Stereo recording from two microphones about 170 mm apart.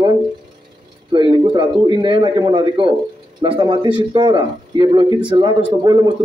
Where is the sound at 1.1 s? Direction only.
25° right (ahead or behind).